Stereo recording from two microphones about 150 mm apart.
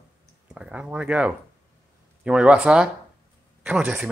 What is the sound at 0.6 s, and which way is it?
Speech, 5° right (ahead or behind).